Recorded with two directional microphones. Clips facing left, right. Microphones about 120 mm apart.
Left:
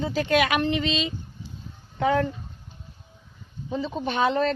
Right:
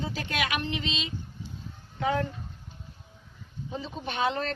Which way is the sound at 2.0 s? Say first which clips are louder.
Left 5 dB; 70° left (ahead or behind).